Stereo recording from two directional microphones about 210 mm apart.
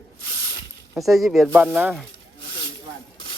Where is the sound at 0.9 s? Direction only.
Centre (ahead or behind).